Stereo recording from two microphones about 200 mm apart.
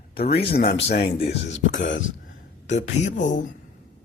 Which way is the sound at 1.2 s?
35° left (ahead or behind).